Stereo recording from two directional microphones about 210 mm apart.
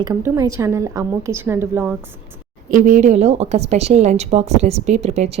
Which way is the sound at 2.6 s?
40° right (ahead or behind).